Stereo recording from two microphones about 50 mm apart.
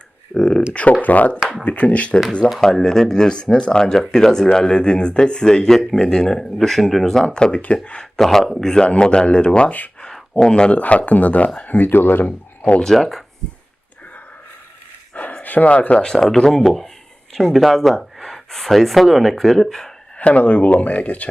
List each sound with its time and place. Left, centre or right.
0.3 s speech: centre
0.7 s speech: left
2.6 s speech: centre
7.3 s speech: centre
8.1 s speech: centre
10.8 s speech: left
12.8 s speech: centre
15.1 s a sound: left
15.4 s speech: left; by 19.9 s centre
20.1 s speech: left